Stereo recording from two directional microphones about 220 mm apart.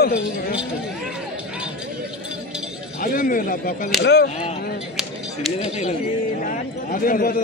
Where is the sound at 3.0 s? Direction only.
40° left (ahead or behind).